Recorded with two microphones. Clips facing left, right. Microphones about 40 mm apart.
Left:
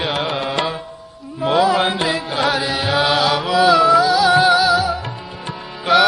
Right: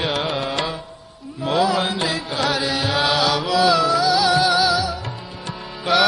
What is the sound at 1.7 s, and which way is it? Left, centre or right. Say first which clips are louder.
Music: left 4 dB; left.